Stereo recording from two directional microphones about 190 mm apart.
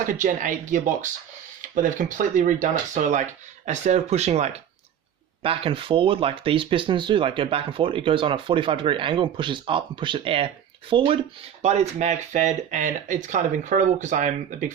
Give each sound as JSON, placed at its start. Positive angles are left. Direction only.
{"t": 0.1, "sound": "speech", "side_deg": -45}